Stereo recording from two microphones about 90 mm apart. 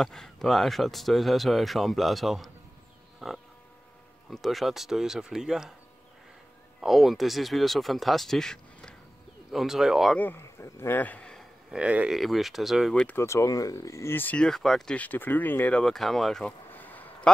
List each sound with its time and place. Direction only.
0.0 s speech: 5° left (ahead or behind)
6.8 s speech: centre (ahead or behind)
10.1 s speech: 20° left (ahead or behind)
10.6 s speech: 30° left (ahead or behind)
11.0 s a sound: 15° left (ahead or behind)
11.7 s speech: 15° right (ahead or behind)
12.1 s speech: centre (ahead or behind)
12.9 s speech: 15° left (ahead or behind)
13.2 s speech: 35° left (ahead or behind)
14.4 s speech: 5° left (ahead or behind)
15.0 s speech: 20° left (ahead or behind)
15.8 s speech: 5° left (ahead or behind)
16.7 s a sound: 20° left (ahead or behind)